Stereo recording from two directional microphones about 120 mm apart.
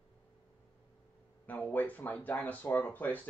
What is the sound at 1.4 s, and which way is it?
Speech, 15° left (ahead or behind).